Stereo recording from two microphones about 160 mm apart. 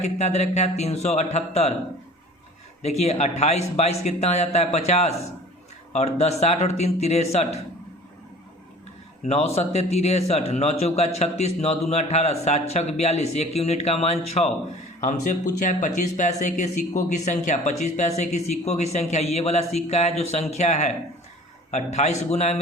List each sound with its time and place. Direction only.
0.0 s speech: 45° left (ahead or behind)
2.8 s speech: 40° left (ahead or behind)
9.2 s a man's voice: 40° left (ahead or behind)
15.0 s speech: 50° left (ahead or behind)